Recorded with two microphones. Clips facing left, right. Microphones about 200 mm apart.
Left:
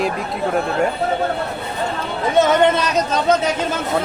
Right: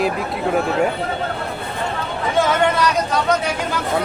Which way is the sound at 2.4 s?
20° left (ahead or behind).